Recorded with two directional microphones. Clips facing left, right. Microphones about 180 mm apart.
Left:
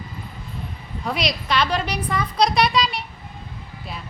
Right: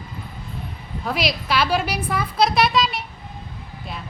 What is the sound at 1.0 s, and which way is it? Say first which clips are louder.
A woman's voice: right 1 dB; centre (ahead or behind).